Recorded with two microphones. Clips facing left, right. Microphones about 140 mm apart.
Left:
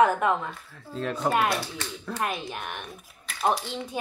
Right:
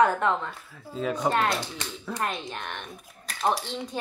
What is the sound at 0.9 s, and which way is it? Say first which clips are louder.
Speech: right 1 dB; 5° right (ahead or behind).